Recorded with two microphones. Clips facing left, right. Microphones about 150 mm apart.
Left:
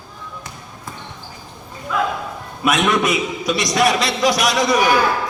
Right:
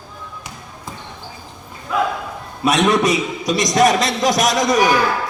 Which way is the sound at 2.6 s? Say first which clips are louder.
Right 2 dB; 35° right (ahead or behind).